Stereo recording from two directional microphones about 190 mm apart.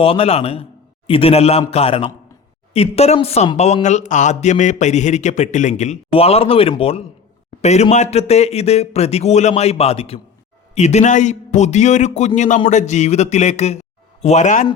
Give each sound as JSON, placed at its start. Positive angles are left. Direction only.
{"t": 0.0, "sound": "a man's voice", "side_deg": 30}